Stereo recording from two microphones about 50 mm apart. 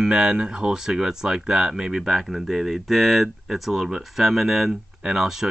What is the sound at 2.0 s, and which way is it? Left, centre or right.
Speech, centre.